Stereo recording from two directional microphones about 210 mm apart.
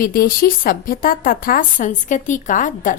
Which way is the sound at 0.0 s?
40° left (ahead or behind).